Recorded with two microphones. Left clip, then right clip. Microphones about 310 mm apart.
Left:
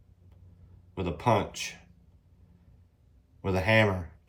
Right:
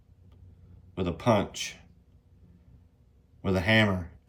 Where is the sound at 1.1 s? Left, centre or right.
Centre.